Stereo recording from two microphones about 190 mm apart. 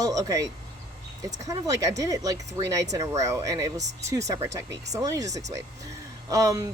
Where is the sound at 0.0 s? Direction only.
20° right (ahead or behind).